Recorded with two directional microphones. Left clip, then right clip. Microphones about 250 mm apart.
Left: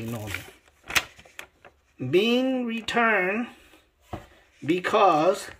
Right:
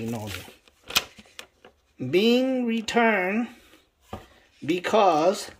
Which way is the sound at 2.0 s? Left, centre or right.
Centre.